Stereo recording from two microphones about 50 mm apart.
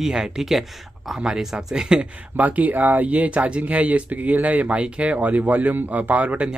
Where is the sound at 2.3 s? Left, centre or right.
Right.